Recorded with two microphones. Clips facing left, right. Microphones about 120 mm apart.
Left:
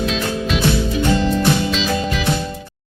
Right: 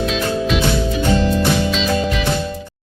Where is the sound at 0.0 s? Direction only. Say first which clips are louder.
Right 2 dB; centre (ahead or behind).